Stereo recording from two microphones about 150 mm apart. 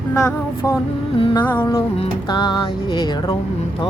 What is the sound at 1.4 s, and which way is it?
Music, 15° left (ahead or behind).